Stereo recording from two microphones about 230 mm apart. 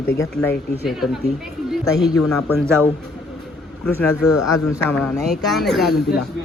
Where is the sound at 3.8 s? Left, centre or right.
Centre.